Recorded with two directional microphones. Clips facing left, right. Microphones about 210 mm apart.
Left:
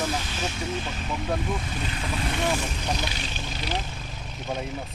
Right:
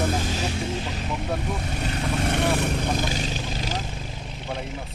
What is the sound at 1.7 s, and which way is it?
Speech, 45° right (ahead or behind).